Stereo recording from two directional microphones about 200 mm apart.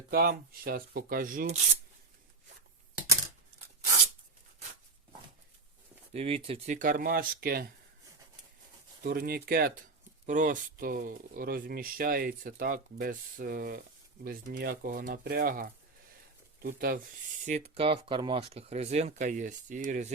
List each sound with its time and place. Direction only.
0.1 s speech: 45° right (ahead or behind)
6.1 s speech: 30° right (ahead or behind)
6.7 s speech: 45° right (ahead or behind)
9.0 s speech: 50° right (ahead or behind)
17.4 s speech: 35° right (ahead or behind)